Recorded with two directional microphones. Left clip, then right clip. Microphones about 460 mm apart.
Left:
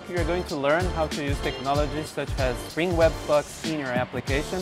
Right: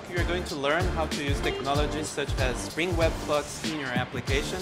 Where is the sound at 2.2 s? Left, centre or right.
Left.